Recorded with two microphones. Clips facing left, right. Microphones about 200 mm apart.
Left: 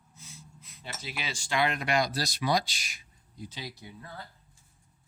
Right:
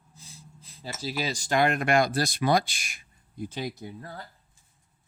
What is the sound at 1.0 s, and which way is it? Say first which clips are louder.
Speech: right 9 dB; 40° right (ahead or behind).